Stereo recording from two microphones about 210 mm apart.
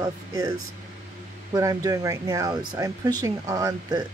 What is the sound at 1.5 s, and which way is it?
Speech, 15° right (ahead or behind).